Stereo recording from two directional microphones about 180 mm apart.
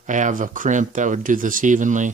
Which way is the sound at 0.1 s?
45° right (ahead or behind).